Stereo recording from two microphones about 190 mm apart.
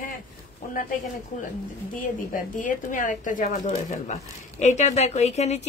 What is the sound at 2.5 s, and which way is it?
Speech, 45° left (ahead or behind).